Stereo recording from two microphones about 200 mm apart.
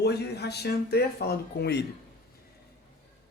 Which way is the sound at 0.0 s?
55° left (ahead or behind).